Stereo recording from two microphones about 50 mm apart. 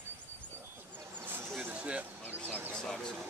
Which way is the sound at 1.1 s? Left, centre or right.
Right.